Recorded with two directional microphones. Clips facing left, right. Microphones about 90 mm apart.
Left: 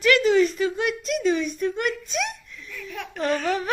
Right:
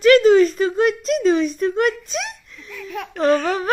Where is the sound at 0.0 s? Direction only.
30° right (ahead or behind).